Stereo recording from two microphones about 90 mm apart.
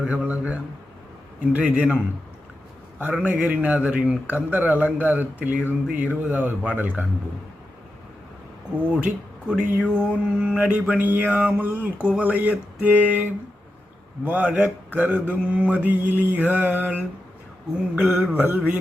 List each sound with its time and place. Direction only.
0.0 s a sound: 15° right (ahead or behind)
1.5 s mantra: 15° right (ahead or behind)
3.2 s mantra: 15° right (ahead or behind)
4.9 s speech: 20° right (ahead or behind)
5.6 s mantra: 15° right (ahead or behind)
9.5 s mantra: 10° right (ahead or behind)